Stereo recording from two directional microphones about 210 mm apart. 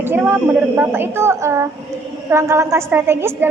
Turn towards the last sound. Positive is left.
turn(degrees=-10)  # may be behind; listen again after turning